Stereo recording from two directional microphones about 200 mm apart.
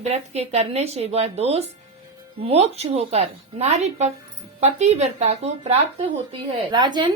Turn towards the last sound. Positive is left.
turn(degrees=-20)  # may be behind; listen again after turning